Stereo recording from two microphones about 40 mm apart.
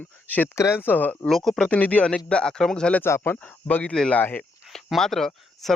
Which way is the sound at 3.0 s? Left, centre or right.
Left.